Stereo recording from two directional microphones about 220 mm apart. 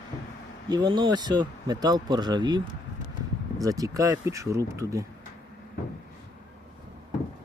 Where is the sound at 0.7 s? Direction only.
20° right (ahead or behind).